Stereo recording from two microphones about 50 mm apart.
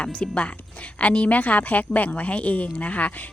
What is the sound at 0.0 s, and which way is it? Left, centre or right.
A woman's voice, left.